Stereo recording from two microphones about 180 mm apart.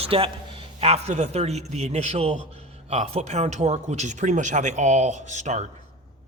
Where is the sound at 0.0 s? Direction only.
30° right (ahead or behind).